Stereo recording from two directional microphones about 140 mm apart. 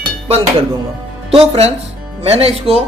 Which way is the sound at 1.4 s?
45° right (ahead or behind).